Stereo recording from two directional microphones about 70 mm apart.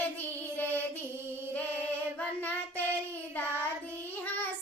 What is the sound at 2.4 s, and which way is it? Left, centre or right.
Child singing, left.